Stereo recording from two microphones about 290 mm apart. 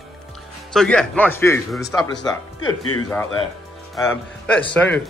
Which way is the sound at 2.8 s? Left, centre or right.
Left.